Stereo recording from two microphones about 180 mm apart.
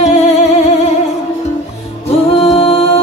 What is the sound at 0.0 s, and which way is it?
Music, 40° left (ahead or behind).